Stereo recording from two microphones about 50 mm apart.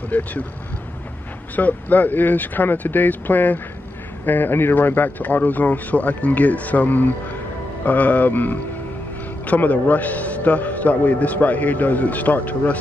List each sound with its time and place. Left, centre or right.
0.1 s a man's voice: left
1.5 s a man's voice: left